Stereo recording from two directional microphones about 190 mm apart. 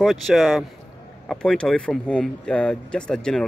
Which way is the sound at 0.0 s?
Centre (ahead or behind).